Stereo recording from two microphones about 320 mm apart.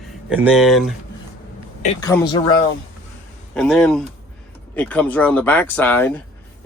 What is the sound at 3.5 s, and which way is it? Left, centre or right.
Speech, centre.